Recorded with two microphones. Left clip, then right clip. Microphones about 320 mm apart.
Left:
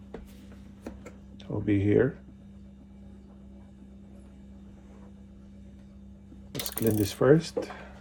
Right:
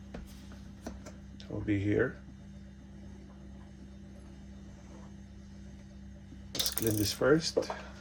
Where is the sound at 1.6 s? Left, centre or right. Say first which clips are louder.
Left 6 dB; left.